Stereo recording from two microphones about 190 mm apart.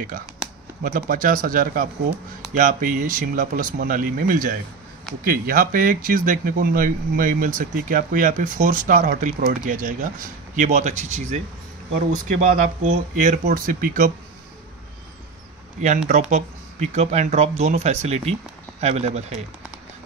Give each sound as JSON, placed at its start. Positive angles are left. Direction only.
{"t": 0.8, "sound": "speech", "side_deg": -45}
{"t": 16.1, "sound": "speech", "side_deg": -40}